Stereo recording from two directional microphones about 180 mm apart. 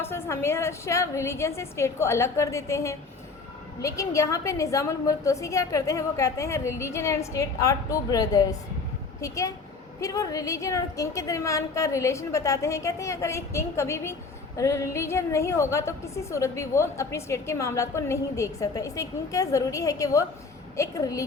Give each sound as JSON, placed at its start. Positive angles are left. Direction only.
{"t": 0.0, "sound": "a woman's voice", "side_deg": 15}